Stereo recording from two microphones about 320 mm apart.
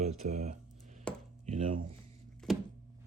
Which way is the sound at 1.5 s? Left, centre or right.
Right.